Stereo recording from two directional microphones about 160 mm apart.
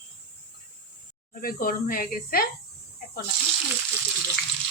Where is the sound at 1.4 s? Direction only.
65° left (ahead or behind).